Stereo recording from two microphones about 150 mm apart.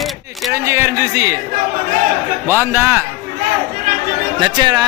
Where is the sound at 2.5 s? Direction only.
15° right (ahead or behind).